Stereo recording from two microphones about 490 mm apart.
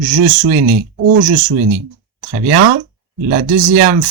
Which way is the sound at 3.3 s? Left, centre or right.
Centre.